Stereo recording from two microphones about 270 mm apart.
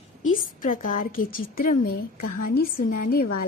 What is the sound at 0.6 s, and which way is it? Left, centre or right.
A woman's voice, left.